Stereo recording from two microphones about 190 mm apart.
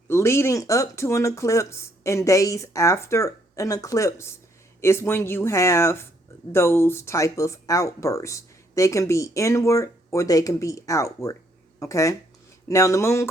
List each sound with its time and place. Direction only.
0.1 s speech: 15° left (ahead or behind)